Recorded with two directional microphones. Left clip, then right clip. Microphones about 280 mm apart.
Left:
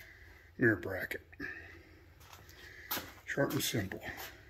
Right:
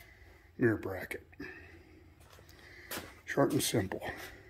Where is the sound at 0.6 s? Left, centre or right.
Centre.